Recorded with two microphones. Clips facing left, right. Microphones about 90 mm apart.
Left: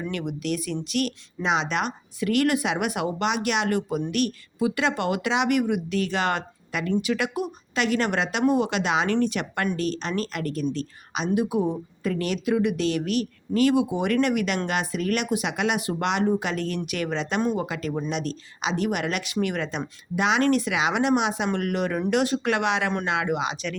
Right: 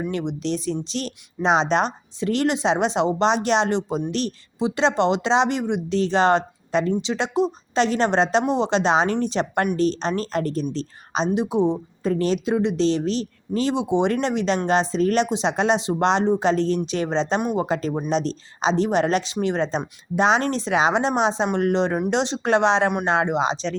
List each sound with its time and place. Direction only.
0.0 s a woman's voice: 25° right (ahead or behind)